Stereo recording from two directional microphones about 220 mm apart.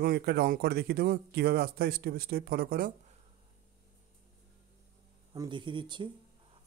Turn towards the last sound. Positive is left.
turn(degrees=-20)  # may be behind; listen again after turning